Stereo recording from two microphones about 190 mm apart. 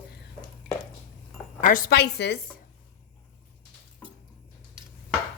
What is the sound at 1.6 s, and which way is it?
Speech, 45° left (ahead or behind).